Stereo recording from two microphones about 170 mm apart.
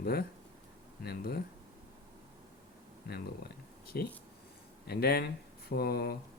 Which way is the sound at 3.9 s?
65° left (ahead or behind).